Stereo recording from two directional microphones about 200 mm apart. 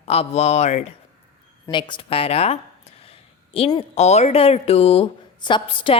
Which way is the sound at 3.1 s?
30° left (ahead or behind).